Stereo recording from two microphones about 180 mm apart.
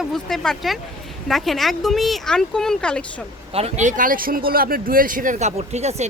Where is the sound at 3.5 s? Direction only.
40° right (ahead or behind).